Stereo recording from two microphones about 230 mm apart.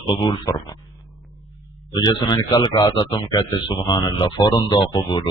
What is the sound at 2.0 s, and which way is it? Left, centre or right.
A man's voice, centre.